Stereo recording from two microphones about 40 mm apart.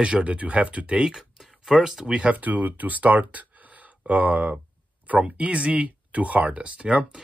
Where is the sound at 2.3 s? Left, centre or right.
Right.